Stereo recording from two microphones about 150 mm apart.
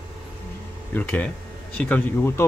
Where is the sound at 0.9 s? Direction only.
10° left (ahead or behind).